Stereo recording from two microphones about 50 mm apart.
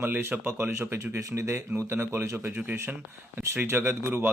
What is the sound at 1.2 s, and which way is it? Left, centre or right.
Speech, right.